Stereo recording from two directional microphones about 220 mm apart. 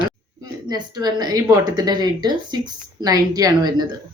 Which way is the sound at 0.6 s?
20° right (ahead or behind).